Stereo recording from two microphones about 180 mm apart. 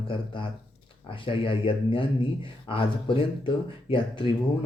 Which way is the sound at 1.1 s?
30° left (ahead or behind).